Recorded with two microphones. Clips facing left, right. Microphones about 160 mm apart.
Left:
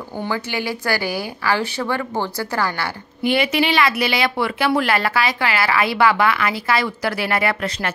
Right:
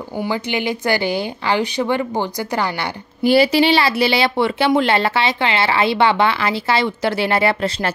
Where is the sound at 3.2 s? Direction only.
35° right (ahead or behind).